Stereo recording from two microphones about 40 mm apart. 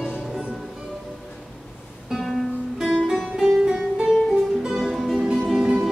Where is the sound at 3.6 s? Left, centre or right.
Centre.